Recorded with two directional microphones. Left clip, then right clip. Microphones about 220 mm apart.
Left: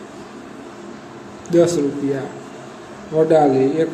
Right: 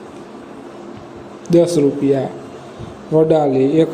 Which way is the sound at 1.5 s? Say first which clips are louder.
Right 3 dB; 20° right (ahead or behind).